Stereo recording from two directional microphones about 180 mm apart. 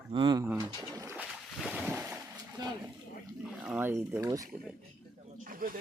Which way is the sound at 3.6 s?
10° right (ahead or behind).